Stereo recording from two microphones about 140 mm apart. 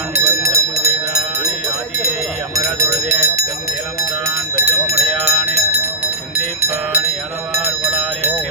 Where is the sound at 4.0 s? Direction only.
20° right (ahead or behind).